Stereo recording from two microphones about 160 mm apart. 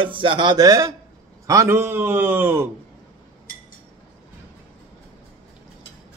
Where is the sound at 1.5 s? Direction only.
15° right (ahead or behind).